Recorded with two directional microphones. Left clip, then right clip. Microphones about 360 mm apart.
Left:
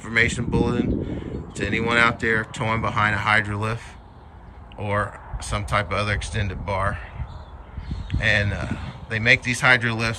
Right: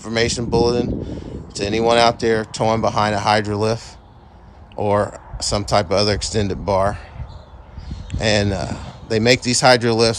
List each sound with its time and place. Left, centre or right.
0.0 s speech: centre
8.1 s speech: centre